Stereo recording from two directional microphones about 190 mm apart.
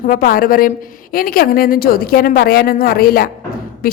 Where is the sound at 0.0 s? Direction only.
50° left (ahead or behind).